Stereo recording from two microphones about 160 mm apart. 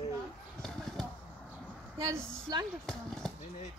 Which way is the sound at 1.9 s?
15° right (ahead or behind).